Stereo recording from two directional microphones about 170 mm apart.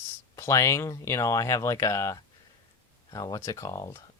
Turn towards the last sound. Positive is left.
turn(degrees=20)  # may be behind; listen again after turning